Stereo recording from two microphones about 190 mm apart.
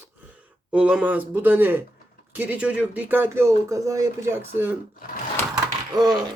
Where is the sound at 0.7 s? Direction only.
5° right (ahead or behind).